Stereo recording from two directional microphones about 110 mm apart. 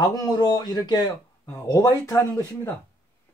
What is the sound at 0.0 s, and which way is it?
Speech, 35° left (ahead or behind).